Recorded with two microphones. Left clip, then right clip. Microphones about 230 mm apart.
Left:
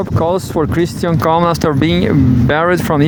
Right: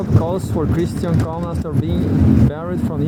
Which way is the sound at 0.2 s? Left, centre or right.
Left.